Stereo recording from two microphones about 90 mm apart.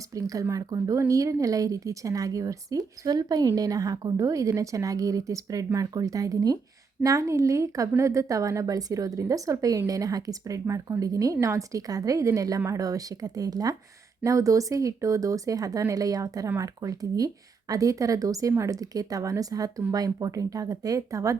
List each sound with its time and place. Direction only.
0.1 s speech: 40° right (ahead or behind)